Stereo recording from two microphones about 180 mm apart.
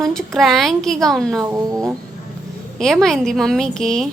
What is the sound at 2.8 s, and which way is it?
A woman's voice, centre (ahead or behind).